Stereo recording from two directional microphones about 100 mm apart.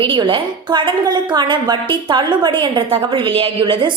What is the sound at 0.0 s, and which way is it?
A woman's voice, 55° right (ahead or behind).